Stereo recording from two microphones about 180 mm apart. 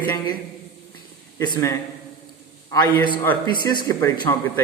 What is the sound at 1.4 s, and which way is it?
Speech, 20° left (ahead or behind).